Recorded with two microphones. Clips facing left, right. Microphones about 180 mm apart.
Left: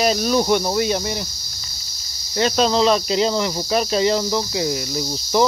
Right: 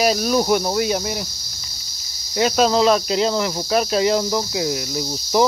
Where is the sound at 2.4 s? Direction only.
5° right (ahead or behind).